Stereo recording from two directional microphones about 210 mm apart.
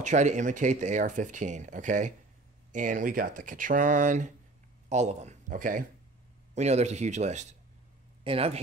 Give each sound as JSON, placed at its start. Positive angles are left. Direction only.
{"t": 0.0, "sound": "speech", "side_deg": -35}